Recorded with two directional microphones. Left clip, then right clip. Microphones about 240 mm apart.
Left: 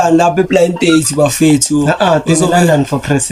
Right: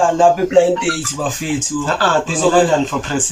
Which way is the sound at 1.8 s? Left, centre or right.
Left.